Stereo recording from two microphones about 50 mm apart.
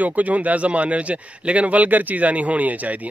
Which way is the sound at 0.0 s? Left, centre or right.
Right.